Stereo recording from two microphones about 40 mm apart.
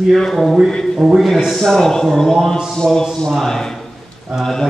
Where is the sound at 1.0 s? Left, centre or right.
Centre.